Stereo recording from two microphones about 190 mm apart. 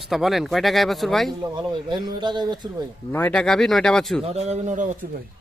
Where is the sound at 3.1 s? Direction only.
10° left (ahead or behind).